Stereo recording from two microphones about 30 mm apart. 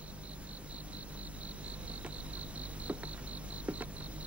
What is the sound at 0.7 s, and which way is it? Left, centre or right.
Cricket, right.